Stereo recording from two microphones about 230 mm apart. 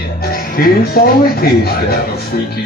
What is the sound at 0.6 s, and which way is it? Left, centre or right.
Speech, left.